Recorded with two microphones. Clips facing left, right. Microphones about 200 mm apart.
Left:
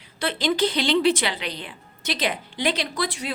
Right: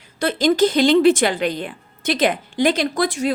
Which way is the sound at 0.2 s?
45° right (ahead or behind).